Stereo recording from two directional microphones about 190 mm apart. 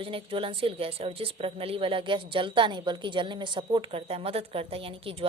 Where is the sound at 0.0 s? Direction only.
30° right (ahead or behind).